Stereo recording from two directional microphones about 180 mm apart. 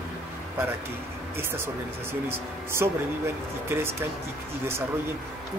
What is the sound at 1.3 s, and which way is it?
Speech, 15° right (ahead or behind).